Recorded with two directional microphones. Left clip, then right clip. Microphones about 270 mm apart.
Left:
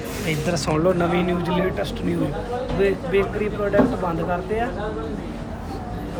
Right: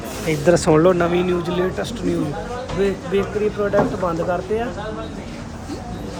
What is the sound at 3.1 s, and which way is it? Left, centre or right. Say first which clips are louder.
Speech: even; centre.